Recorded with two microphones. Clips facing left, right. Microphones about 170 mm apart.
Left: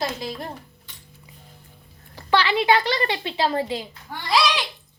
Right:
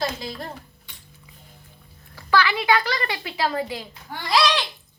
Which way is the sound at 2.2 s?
25° left (ahead or behind).